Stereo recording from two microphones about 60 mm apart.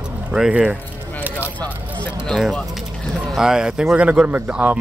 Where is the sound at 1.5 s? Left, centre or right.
Left.